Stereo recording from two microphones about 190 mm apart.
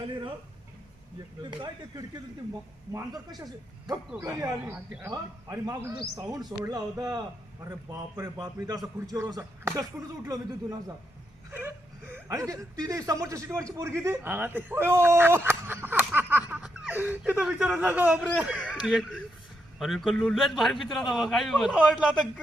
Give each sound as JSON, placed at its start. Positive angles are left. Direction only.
{"t": 1.4, "sound": "a man's voice", "side_deg": -25}
{"t": 4.2, "sound": "a man's voice", "side_deg": -15}
{"t": 12.1, "sound": "a man's voice", "side_deg": -15}